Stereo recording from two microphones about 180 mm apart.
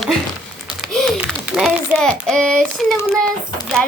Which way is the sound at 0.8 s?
Centre (ahead or behind).